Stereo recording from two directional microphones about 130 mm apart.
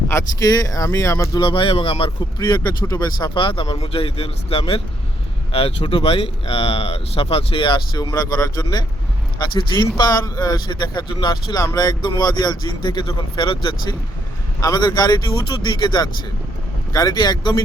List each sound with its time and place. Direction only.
0.1 s speech: 25° left (ahead or behind)
1.4 s speech: 40° left (ahead or behind)